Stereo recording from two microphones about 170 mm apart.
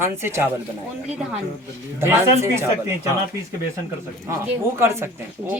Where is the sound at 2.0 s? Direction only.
15° right (ahead or behind).